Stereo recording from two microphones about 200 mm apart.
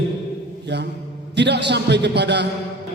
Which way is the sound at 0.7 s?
60° right (ahead or behind).